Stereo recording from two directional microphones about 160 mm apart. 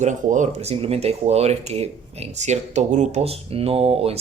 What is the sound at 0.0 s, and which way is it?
Speech, 50° right (ahead or behind).